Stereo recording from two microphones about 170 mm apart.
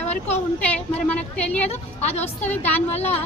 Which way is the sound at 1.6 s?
40° left (ahead or behind).